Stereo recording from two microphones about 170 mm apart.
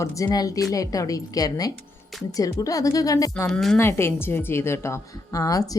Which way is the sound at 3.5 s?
Centre (ahead or behind).